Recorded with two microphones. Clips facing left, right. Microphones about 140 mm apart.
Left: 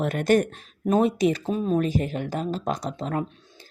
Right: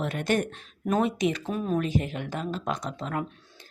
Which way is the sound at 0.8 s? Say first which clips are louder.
Left 4 dB; 30° left (ahead or behind).